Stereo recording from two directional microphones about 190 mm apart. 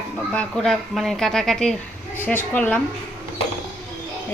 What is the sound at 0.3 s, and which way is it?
A woman's voice, 5° left (ahead or behind).